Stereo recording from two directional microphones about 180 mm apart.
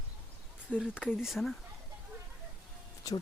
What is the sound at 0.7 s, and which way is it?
Speech, 5° right (ahead or behind).